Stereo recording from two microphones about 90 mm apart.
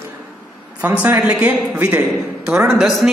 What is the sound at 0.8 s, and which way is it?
A man's voice, 20° right (ahead or behind).